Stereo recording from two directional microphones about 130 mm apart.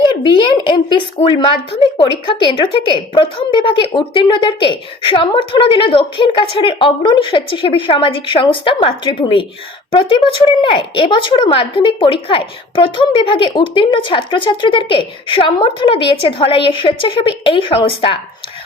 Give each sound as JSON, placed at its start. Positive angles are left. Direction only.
{"t": 0.0, "sound": "a woman's voice", "side_deg": 40}